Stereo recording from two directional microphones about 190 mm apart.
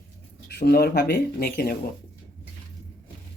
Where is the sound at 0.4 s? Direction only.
55° left (ahead or behind).